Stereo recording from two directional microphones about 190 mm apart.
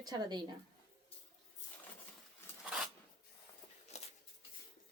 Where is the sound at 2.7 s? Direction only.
5° right (ahead or behind).